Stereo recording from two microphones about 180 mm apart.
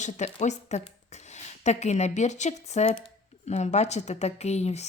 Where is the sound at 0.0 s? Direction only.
40° left (ahead or behind).